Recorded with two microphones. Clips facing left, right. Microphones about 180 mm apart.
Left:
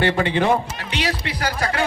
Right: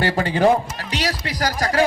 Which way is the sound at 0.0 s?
40° right (ahead or behind).